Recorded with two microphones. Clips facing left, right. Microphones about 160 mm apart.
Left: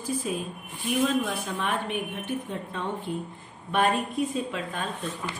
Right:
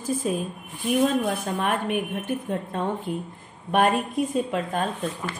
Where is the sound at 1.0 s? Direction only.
45° right (ahead or behind).